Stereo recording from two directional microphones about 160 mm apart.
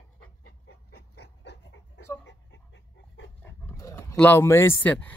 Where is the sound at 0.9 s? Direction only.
90° left.